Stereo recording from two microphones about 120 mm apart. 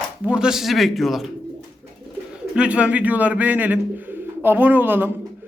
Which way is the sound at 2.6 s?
10° right (ahead or behind).